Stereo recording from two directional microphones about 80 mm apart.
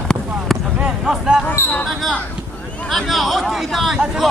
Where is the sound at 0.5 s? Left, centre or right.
Centre.